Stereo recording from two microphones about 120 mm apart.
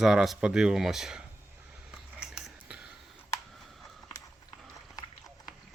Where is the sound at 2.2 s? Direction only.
10° right (ahead or behind).